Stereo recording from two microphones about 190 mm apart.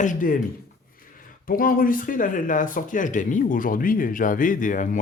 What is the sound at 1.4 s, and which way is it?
Speech, 50° left (ahead or behind).